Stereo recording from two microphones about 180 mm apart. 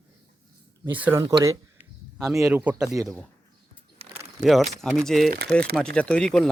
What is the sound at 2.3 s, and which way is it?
Speech, centre (ahead or behind).